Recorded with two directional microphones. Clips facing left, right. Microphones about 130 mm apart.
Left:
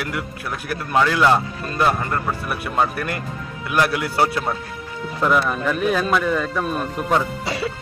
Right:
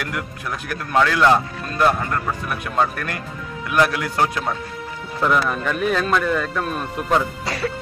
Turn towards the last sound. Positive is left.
turn(degrees=25)  # may be behind; listen again after turning